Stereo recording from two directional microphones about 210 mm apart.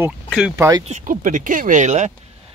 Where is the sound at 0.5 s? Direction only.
15° right (ahead or behind).